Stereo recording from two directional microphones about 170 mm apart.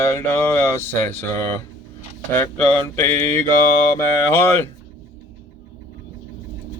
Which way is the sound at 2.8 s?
15° left (ahead or behind).